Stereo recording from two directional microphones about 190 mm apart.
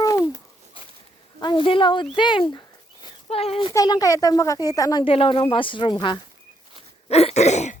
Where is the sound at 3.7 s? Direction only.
20° left (ahead or behind).